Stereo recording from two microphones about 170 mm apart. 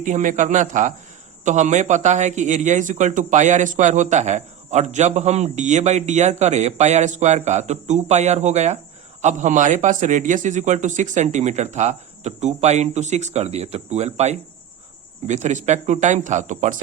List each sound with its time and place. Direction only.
0.0 s a man's voice: 50° right (ahead or behind)